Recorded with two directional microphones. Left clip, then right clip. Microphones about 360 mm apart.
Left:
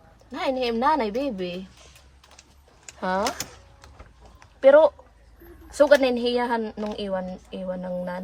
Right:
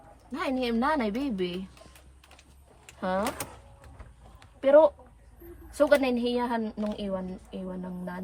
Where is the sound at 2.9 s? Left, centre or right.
Left.